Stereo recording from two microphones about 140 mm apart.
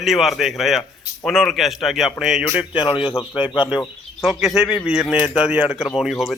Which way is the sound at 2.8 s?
35° left (ahead or behind).